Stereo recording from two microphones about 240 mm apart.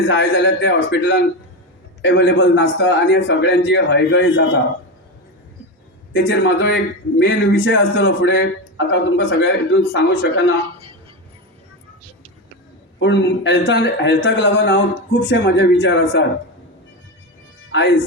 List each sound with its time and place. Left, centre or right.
0.0 s a man's voice: left
6.1 s a man's voice: left
13.0 s a man's voice: left
17.7 s speech: left